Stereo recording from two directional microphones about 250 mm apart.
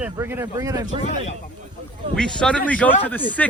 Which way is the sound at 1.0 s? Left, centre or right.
Left.